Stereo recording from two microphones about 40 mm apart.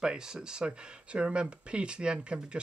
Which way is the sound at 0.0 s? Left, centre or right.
Centre.